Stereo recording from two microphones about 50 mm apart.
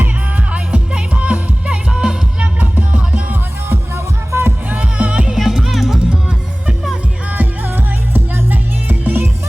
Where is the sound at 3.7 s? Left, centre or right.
Right.